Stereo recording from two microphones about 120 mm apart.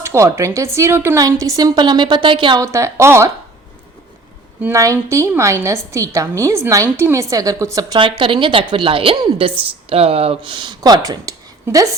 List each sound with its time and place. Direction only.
0.0 s a woman's voice: 25° right (ahead or behind); by 2.6 s 45° right (ahead or behind)
2.6 s a woman's voice: 25° right (ahead or behind)
4.7 s a woman's voice: 25° right (ahead or behind)
8.2 s a woman's voice: 45° right (ahead or behind); by 11.9 s 30° right (ahead or behind)